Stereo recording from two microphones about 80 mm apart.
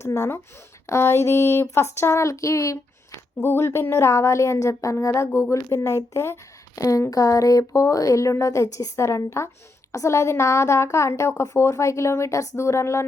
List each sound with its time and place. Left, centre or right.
0.0 s speech: left
3.3 s speech: left